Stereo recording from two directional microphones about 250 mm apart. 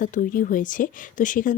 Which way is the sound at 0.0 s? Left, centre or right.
Left.